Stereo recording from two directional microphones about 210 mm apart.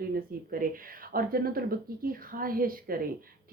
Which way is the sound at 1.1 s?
45° right (ahead or behind).